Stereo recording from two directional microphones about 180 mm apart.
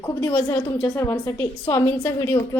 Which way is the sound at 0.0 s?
20° left (ahead or behind).